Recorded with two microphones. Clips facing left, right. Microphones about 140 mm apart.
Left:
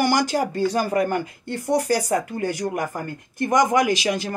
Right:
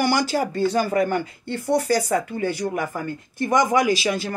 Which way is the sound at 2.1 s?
45° left (ahead or behind).